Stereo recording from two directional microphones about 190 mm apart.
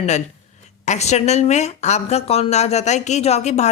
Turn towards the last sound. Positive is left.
turn(degrees=35)  # may be behind; listen again after turning